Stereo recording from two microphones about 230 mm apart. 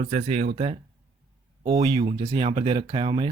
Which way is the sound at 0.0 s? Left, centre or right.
Right.